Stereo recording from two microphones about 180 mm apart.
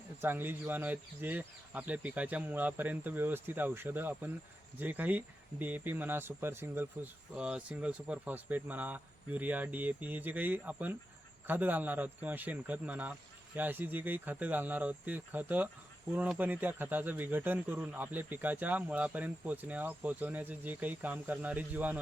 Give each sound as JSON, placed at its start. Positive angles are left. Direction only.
{"t": 0.2, "sound": "speech", "side_deg": -10}